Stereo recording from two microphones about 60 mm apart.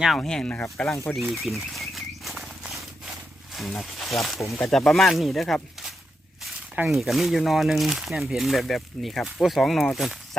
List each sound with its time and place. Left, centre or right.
0.2 s speech: centre
1.3 s a sound: centre
3.5 s speech: centre
4.4 s speech: left
4.6 s speech: centre
6.8 s speech: centre